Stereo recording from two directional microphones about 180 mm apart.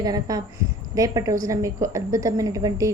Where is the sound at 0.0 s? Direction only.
20° right (ahead or behind).